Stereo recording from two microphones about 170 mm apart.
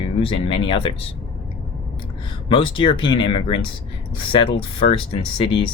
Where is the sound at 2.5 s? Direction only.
30° left (ahead or behind).